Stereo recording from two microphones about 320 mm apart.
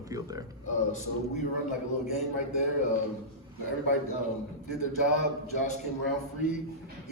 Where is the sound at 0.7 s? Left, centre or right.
Left.